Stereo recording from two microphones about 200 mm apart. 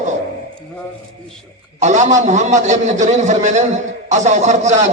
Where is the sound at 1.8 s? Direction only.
35° right (ahead or behind).